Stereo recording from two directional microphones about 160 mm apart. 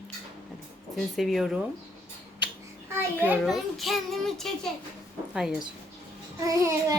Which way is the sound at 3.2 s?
5° right (ahead or behind).